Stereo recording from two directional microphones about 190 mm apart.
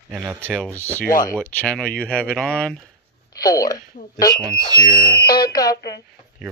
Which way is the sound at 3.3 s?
20° left (ahead or behind).